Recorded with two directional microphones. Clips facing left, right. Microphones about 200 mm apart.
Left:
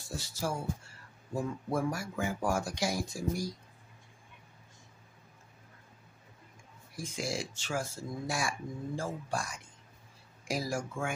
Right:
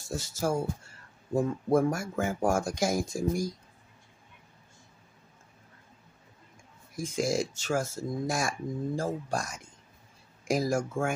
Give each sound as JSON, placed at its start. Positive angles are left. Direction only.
{"t": 0.0, "sound": "speech", "side_deg": -45}
{"t": 7.0, "sound": "speech", "side_deg": -45}